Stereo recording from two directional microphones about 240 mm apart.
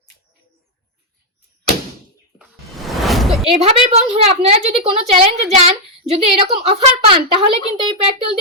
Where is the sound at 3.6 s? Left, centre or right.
Right.